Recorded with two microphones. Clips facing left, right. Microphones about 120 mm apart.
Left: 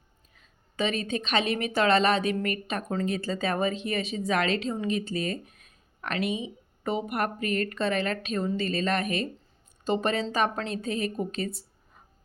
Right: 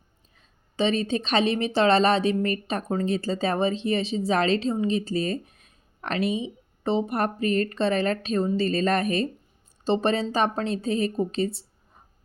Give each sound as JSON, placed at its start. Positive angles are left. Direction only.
{"t": 0.3, "sound": "speech", "side_deg": -30}